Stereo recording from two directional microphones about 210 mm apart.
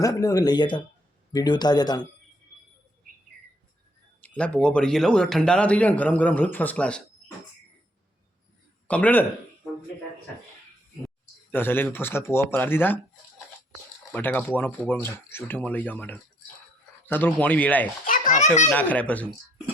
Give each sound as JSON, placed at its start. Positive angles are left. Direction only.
{"t": 0.0, "sound": "speech", "side_deg": 15}
{"t": 4.2, "sound": "speech", "side_deg": 5}
{"t": 8.9, "sound": "speech", "side_deg": 5}
{"t": 11.5, "sound": "speech", "side_deg": 10}
{"t": 14.1, "sound": "speech", "side_deg": 10}
{"t": 18.0, "sound": "a child's voice", "side_deg": 40}
{"t": 18.7, "sound": "speech", "side_deg": 5}